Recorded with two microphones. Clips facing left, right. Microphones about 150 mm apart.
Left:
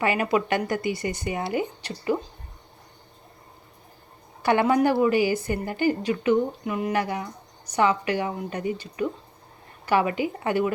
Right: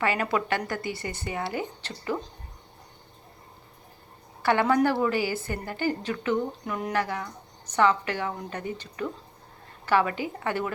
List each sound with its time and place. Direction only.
0.0 s a woman's voice: 15° left (ahead or behind)
4.4 s a woman's voice: 15° left (ahead or behind)